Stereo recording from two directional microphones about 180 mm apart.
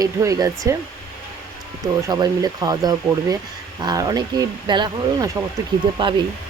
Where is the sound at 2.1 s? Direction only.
20° right (ahead or behind).